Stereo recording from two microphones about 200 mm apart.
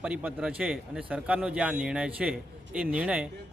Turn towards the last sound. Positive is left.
turn(degrees=-5)  # may be behind; listen again after turning